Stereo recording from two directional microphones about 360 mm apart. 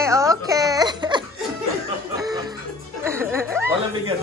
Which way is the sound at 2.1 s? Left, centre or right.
Centre.